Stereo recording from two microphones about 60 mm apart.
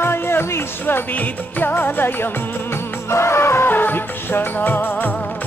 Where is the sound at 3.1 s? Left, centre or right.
Left.